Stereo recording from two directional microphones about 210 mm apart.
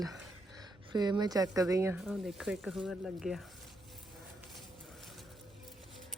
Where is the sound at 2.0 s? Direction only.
Centre (ahead or behind).